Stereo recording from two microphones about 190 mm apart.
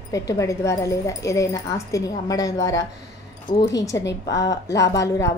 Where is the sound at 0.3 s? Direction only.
15° left (ahead or behind).